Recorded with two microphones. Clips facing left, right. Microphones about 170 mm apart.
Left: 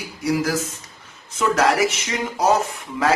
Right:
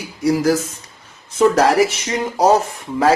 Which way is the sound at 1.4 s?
30° right (ahead or behind).